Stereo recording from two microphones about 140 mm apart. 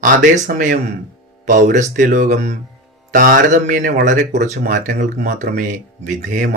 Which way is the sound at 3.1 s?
70° right (ahead or behind).